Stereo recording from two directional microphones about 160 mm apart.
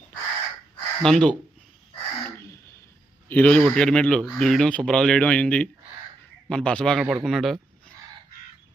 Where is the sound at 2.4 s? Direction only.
15° left (ahead or behind).